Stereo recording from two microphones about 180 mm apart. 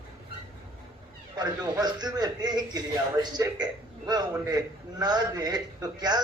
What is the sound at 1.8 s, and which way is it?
A man's voice, 25° right (ahead or behind).